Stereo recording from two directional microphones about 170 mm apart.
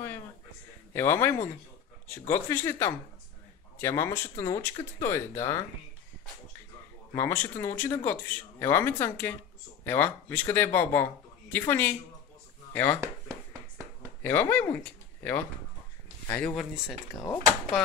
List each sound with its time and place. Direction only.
0.9 s speech: 15° left (ahead or behind)
7.2 s speech: 15° left (ahead or behind)
14.2 s speech: 10° left (ahead or behind)
17.1 s speech: 20° left (ahead or behind)